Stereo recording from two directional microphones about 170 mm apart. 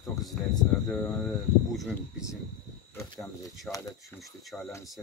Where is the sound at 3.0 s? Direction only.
20° left (ahead or behind).